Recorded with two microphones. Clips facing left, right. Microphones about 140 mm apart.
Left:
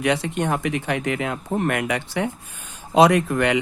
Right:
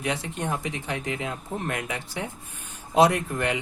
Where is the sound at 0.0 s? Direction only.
90° left; by 2.3 s 70° left (ahead or behind).